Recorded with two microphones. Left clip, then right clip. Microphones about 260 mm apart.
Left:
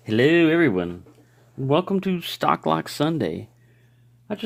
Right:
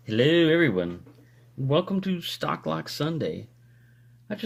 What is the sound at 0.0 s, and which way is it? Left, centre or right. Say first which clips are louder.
Speech: left 3 dB; left.